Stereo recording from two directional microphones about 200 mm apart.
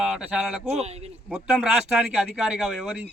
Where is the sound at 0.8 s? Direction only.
30° right (ahead or behind).